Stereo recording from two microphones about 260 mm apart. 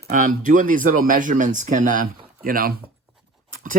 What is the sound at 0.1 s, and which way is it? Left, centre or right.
Speech, right.